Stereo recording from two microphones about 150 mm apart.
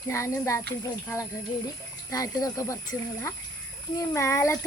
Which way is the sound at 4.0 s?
20° left (ahead or behind).